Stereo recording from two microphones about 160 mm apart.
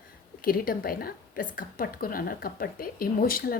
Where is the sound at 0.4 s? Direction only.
65° left (ahead or behind).